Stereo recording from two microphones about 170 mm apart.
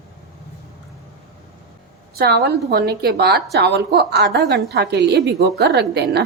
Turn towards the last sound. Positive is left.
turn(degrees=-70)  # may be behind; listen again after turning